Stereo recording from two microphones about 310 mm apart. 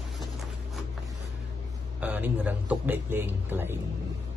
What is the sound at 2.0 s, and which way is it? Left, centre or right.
A man's voice, centre.